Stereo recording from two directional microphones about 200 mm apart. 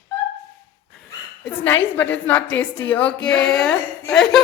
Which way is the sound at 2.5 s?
70° left (ahead or behind).